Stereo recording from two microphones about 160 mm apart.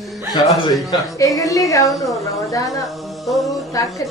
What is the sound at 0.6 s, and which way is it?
A woman's voice, 20° left (ahead or behind).